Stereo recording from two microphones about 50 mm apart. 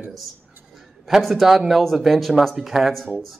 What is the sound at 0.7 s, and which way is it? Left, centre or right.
A man's voice, centre.